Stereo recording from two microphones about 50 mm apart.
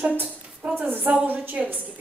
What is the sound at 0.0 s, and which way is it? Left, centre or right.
A woman's voice, right.